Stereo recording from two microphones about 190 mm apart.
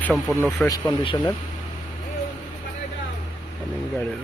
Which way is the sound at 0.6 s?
20° left (ahead or behind).